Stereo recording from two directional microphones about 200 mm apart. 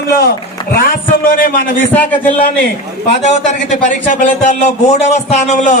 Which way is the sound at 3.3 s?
35° left (ahead or behind).